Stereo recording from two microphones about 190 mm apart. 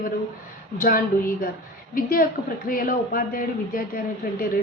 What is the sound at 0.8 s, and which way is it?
A woman's voice, 45° left (ahead or behind).